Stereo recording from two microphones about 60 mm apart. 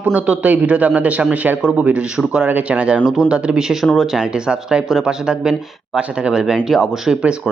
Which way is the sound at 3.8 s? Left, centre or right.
Centre.